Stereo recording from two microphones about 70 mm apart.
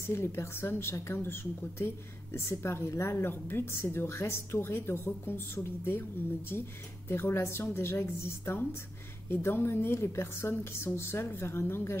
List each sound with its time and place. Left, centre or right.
0.0 s a woman's voice: left